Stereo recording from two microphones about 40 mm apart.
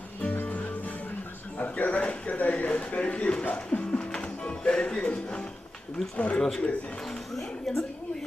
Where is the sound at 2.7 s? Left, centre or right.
Left.